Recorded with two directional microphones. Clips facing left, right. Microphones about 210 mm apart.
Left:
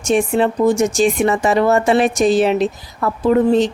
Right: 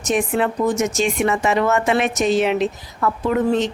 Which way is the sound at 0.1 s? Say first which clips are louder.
Left 4 dB; 30° left (ahead or behind).